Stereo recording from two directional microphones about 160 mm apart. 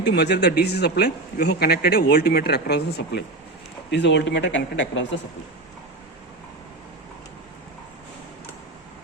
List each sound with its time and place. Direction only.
0.0 s speech: 90° left